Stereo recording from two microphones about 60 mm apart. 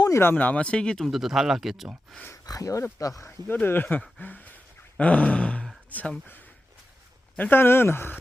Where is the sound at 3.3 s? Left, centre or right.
Left.